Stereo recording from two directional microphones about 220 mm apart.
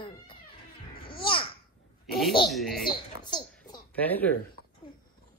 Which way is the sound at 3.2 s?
20° left (ahead or behind).